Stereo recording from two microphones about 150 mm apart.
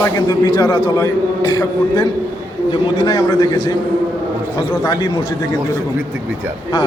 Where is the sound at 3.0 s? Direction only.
25° left (ahead or behind).